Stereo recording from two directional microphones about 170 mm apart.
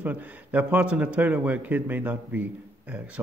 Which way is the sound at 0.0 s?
10° right (ahead or behind).